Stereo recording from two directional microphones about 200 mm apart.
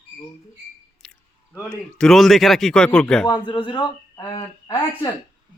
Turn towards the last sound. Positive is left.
turn(degrees=20)  # may be behind; listen again after turning